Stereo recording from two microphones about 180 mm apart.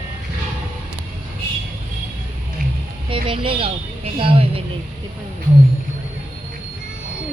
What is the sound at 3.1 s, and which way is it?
A woman's voice, 30° right (ahead or behind).